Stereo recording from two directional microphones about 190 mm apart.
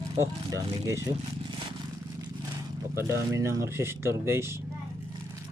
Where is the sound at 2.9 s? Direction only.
15° right (ahead or behind).